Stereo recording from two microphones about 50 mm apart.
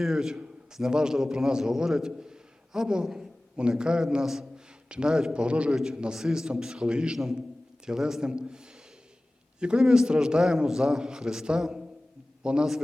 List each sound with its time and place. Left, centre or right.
0.0 s a man's voice: centre
5.7 s a man's voice: centre